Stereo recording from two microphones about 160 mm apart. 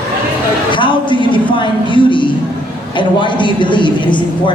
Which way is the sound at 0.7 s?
30° left (ahead or behind).